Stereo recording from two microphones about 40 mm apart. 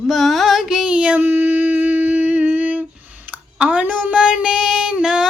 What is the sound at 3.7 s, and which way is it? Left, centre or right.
Speech, right.